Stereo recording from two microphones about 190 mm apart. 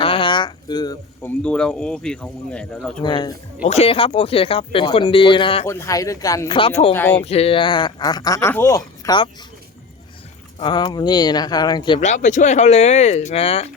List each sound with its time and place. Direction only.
0.0 s a sound: 25° left (ahead or behind)
1.2 s speech: 10° left (ahead or behind)
3.0 s speech: 25° left (ahead or behind)
3.6 s speech: 35° left (ahead or behind)
5.6 s speech: 15° left (ahead or behind); by 6.9 s 30° left (ahead or behind)
6.9 s speech: 10° left (ahead or behind)
7.2 s speech: 35° left (ahead or behind)
10.6 s speech: 25° left (ahead or behind)
11.9 s speech: 40° left (ahead or behind)